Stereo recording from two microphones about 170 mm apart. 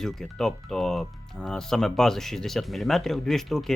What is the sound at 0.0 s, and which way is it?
Speech, centre (ahead or behind).